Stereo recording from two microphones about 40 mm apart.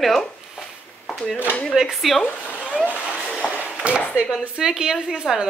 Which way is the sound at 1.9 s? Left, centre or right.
Centre.